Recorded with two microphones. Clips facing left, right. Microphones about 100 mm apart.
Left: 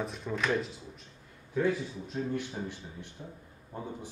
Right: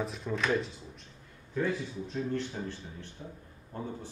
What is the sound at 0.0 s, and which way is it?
A man's voice, centre (ahead or behind).